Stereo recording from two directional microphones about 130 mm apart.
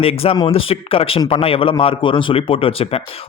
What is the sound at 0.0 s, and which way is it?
A man's voice, 50° left (ahead or behind).